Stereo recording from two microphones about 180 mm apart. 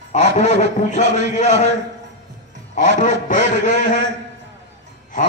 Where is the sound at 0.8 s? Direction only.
40° left (ahead or behind).